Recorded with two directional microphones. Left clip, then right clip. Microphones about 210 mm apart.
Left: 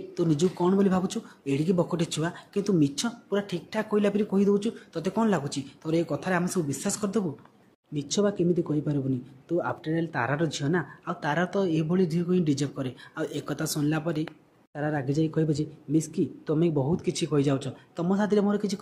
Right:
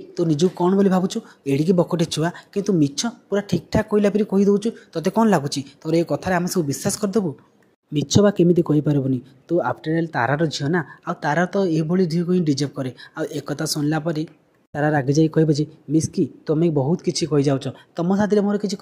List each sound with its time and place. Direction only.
0.1 s speech: 20° right (ahead or behind)